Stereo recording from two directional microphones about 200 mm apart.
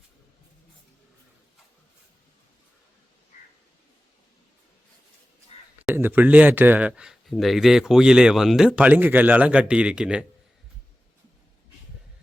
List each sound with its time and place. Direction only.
5.8 s speech: 10° right (ahead or behind)